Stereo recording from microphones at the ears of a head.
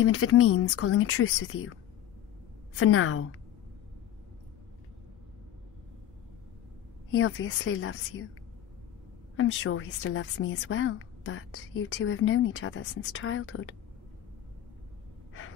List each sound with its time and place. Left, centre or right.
0.0 s a woman's voice: left
7.1 s a woman's voice: left
9.4 s a woman's voice: left